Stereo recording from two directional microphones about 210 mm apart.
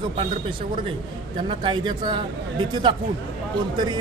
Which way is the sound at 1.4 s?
20° right (ahead or behind).